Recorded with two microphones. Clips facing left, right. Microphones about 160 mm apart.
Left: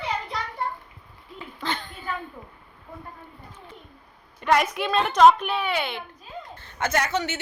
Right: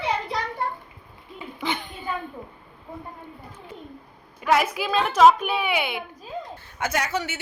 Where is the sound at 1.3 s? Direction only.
10° right (ahead or behind).